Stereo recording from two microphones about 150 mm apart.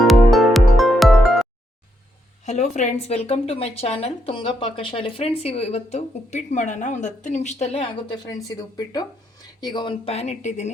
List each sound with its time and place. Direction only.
0.0 s music: centre (ahead or behind)
2.5 s speech: 50° left (ahead or behind)
8.1 s speech: 25° left (ahead or behind)
10.1 s speech: 45° left (ahead or behind)